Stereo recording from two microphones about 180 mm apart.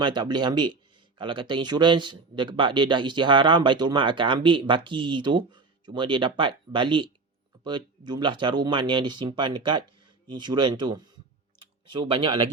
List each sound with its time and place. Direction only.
0.0 s a man's voice: 25° right (ahead or behind)